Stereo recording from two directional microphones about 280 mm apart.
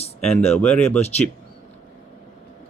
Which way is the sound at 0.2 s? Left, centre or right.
Centre.